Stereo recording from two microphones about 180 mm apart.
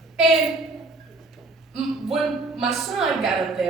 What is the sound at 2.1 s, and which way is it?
A woman's voice, centre (ahead or behind).